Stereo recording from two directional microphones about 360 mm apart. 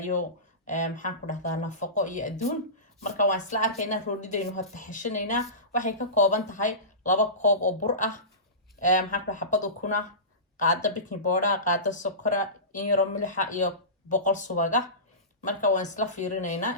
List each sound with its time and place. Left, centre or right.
0.0 s speech: left